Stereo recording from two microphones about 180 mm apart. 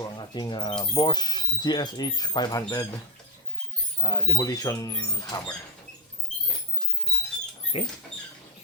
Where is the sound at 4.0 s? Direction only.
20° left (ahead or behind).